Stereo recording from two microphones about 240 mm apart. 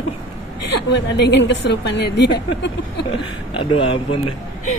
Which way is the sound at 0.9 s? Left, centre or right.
Left.